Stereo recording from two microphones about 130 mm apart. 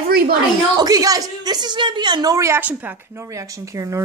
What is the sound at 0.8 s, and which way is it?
A woman's voice, 30° right (ahead or behind).